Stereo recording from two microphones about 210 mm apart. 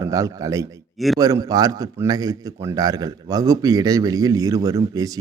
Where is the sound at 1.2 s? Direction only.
15° right (ahead or behind).